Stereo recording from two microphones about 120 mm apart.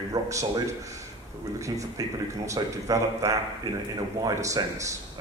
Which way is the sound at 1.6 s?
25° right (ahead or behind).